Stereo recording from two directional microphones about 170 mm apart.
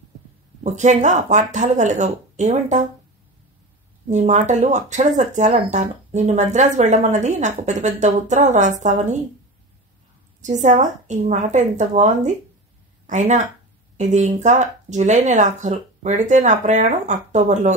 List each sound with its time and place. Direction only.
0.7 s speech: 45° right (ahead or behind)
4.1 s speech: 45° right (ahead or behind)
10.4 s speech: 45° right (ahead or behind)